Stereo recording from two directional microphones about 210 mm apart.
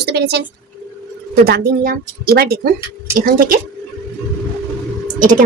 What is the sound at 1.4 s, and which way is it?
Speech, 50° right (ahead or behind).